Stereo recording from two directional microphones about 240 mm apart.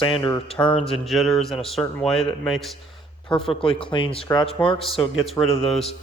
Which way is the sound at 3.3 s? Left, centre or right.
Left.